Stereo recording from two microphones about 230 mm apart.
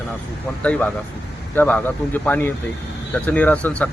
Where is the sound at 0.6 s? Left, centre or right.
Centre.